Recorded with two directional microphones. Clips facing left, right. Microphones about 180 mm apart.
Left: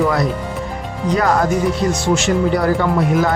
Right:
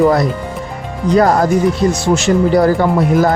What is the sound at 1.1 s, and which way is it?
Speech, 35° right (ahead or behind).